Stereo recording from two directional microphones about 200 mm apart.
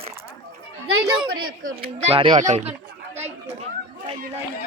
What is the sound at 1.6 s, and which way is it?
Speech, 40° right (ahead or behind).